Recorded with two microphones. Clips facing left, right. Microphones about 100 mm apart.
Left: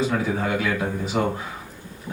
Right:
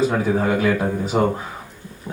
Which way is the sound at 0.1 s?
35° right (ahead or behind).